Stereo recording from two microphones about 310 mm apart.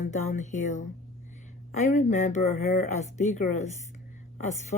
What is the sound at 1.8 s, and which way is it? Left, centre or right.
Speech, left.